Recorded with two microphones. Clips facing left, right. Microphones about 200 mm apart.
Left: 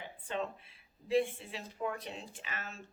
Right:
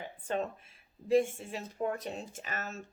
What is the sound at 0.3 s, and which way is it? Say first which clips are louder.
A woman's voice: right 4 dB; 45° right (ahead or behind).